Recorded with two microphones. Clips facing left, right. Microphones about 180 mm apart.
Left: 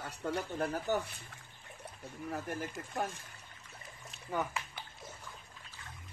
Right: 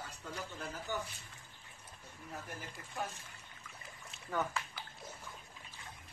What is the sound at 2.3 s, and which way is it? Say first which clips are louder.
Speech: left 7 dB; 60° left (ahead or behind).